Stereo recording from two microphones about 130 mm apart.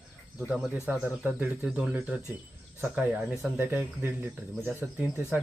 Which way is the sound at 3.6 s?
15° right (ahead or behind).